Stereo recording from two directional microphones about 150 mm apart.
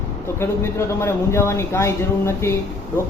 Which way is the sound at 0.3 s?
15° left (ahead or behind).